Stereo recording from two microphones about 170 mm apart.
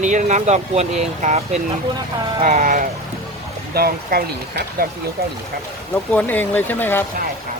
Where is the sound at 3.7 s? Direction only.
65° right (ahead or behind).